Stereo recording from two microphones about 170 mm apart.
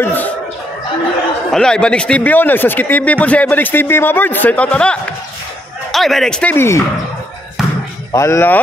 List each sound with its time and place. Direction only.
0.0 s chicken: 10° left (ahead or behind)
1.5 s speech: 5° left (ahead or behind)
7.6 s basketball bounce: centre (ahead or behind)
8.1 s speech: 15° left (ahead or behind)